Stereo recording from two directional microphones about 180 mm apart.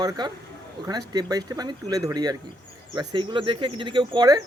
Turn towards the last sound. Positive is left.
turn(degrees=-20)  # may be behind; listen again after turning